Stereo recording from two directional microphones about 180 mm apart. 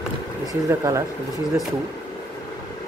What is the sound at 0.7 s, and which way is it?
Speech, 15° right (ahead or behind).